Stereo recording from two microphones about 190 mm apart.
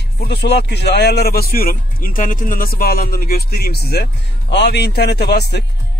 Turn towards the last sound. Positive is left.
turn(degrees=60)  # may be behind; listen again after turning